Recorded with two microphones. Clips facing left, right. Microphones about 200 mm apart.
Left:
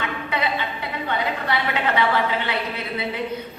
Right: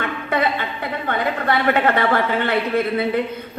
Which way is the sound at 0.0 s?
50° right (ahead or behind).